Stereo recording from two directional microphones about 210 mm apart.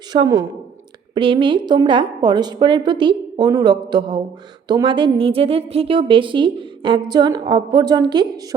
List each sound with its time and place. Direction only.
0.1 s a woman's voice: 20° right (ahead or behind)